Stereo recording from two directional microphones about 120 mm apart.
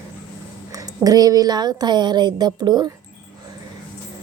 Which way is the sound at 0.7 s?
30° right (ahead or behind).